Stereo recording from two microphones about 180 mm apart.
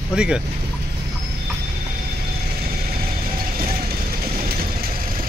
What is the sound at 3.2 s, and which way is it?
Vehicle, 55° right (ahead or behind).